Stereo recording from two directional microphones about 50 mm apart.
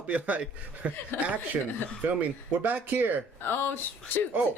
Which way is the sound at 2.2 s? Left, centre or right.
Right.